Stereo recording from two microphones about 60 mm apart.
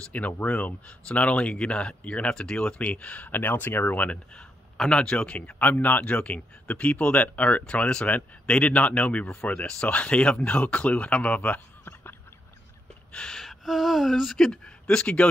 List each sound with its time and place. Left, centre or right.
0.1 s speech: left
4.7 s speech: centre
5.5 s speech: left
11.8 s a sound: left
13.1 s gasp: centre
13.4 s speech: centre